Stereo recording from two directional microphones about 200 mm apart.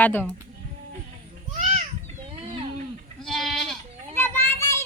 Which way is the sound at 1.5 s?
35° right (ahead or behind).